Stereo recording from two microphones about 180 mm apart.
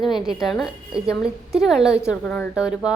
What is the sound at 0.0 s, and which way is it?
A woman's voice, centre (ahead or behind).